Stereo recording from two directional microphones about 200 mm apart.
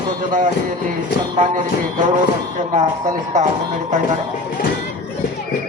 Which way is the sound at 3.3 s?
35° right (ahead or behind).